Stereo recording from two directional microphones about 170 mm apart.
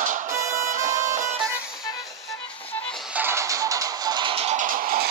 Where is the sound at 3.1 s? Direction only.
10° right (ahead or behind).